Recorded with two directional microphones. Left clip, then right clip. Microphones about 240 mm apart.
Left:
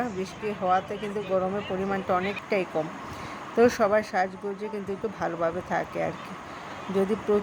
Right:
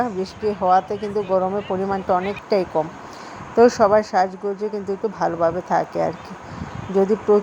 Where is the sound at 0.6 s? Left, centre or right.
Centre.